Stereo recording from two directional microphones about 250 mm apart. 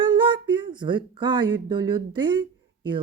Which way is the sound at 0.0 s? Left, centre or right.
Centre.